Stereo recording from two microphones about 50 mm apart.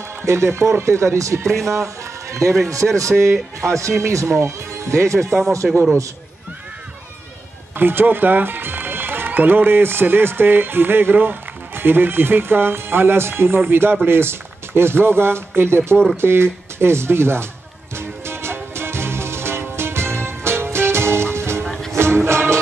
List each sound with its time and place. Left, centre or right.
0.2 s a man's voice: right
2.8 s a man's voice: centre
3.2 s a man's voice: right
5.6 s a man's voice: centre
7.7 s speech: right
17.9 s music: right